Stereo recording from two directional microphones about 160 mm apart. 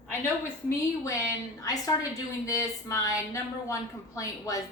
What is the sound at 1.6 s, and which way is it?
A woman's voice, 20° left (ahead or behind).